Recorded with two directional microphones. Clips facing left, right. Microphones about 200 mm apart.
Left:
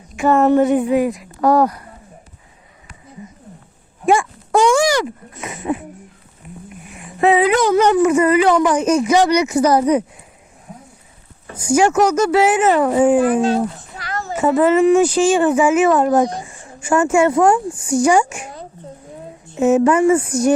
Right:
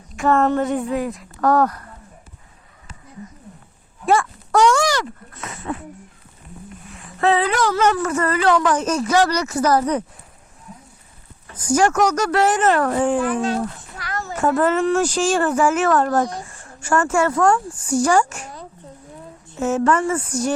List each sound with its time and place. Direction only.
0.3 s a woman's voice: 10° left (ahead or behind)
4.0 s a sound: 10° left (ahead or behind)
4.9 s dog: 15° left (ahead or behind)
6.9 s a woman's voice: 15° left (ahead or behind)
11.5 s a woman's voice: 10° left (ahead or behind)
13.1 s speech: 35° left (ahead or behind)
13.6 s a sound: 25° left (ahead or behind)
14.3 s a woman's voice: 5° left (ahead or behind)
17.2 s speech: 20° left (ahead or behind)
17.4 s a woman's voice: 10° left (ahead or behind)
19.5 s a woman's voice: 15° left (ahead or behind)